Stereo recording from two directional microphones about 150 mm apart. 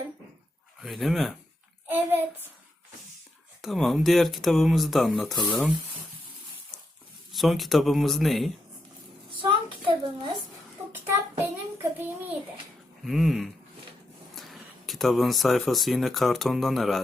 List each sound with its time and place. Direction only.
0.8 s speech: centre (ahead or behind)
1.9 s child singing: 10° right (ahead or behind)
3.6 s speech: centre (ahead or behind)
7.3 s speech: centre (ahead or behind)
9.4 s a sound: 35° right (ahead or behind)
11.8 s a sound: 15° right (ahead or behind)
13.1 s speech: centre (ahead or behind)